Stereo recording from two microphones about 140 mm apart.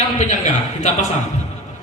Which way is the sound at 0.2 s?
55° left (ahead or behind).